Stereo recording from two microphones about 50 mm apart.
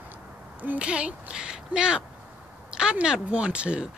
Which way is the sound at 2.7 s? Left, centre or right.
Centre.